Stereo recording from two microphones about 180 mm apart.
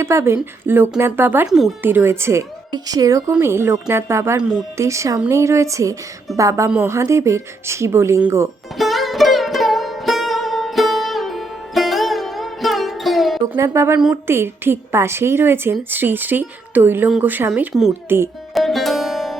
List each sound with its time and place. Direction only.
0.0 s a woman's voice: 15° right (ahead or behind)
8.8 s music: centre (ahead or behind)
13.6 s a woman's voice: 15° right (ahead or behind)
18.5 s music: centre (ahead or behind)